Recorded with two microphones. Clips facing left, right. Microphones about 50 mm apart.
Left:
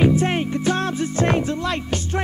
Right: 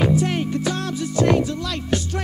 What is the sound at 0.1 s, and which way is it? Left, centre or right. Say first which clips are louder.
Music: left 1 dB; left.